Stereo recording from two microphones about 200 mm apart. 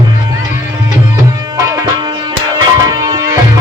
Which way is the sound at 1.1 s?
15° right (ahead or behind).